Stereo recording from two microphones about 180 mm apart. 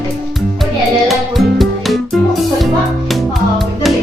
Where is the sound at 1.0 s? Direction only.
Centre (ahead or behind).